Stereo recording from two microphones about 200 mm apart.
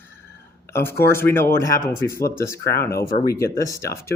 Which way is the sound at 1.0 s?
10° left (ahead or behind).